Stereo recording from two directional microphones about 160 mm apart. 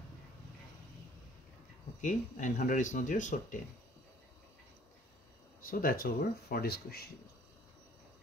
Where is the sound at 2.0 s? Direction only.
50° left (ahead or behind).